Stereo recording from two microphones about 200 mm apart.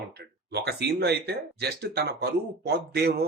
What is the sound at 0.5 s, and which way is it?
Speech, 55° right (ahead or behind).